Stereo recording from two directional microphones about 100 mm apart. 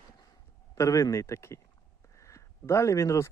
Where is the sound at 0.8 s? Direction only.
35° left (ahead or behind).